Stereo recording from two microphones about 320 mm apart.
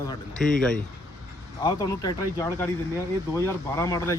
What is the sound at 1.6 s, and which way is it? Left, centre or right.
Speech, centre.